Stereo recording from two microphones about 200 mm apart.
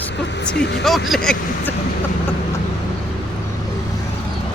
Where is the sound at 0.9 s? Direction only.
Centre (ahead or behind).